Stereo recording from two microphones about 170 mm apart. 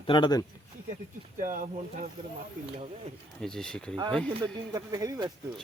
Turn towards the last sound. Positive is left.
turn(degrees=-20)  # may be behind; listen again after turning